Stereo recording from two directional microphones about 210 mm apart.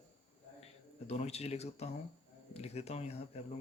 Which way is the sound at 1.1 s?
30° left (ahead or behind).